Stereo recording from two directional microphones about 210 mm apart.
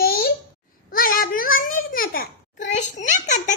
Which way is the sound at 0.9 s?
45° left (ahead or behind).